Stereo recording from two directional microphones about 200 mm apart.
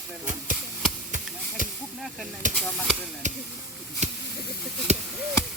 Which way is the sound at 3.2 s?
35° right (ahead or behind).